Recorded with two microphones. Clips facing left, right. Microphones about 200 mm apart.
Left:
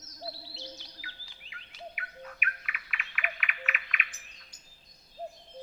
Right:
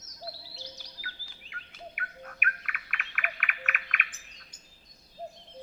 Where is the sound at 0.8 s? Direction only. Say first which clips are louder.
Right 2 dB; 45° right (ahead or behind).